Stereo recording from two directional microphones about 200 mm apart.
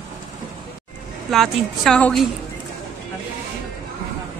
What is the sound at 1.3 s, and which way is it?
Speech, centre (ahead or behind).